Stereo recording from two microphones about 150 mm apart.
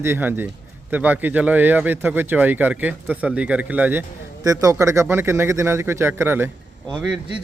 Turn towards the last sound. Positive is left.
turn(degrees=0)  # may be behind; listen again after turning